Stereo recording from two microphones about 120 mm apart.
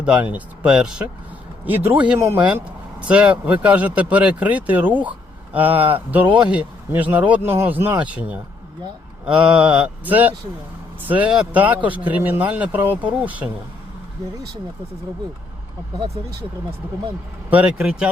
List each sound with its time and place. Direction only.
0.0 s speech: 10° right (ahead or behind)
2.4 s speech: 10° right (ahead or behind)
17.5 s speech: 10° right (ahead or behind)